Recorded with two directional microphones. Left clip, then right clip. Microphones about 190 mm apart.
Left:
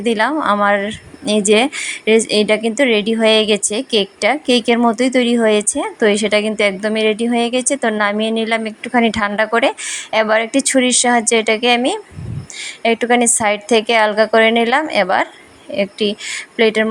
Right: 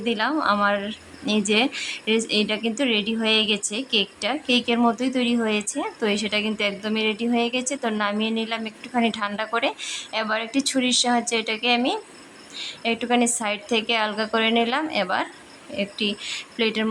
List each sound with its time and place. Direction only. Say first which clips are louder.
0.0 s a woman's voice: left 7 dB; 25° left (ahead or behind)